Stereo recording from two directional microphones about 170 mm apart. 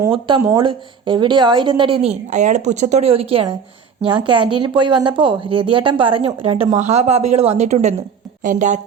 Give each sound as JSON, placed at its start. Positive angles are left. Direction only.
{"t": 0.1, "sound": "a woman's voice", "side_deg": -30}